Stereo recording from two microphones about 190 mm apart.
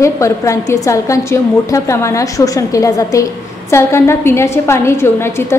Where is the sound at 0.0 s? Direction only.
15° left (ahead or behind).